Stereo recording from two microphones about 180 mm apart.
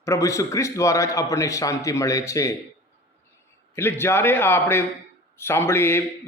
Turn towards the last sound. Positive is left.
turn(degrees=15)  # may be behind; listen again after turning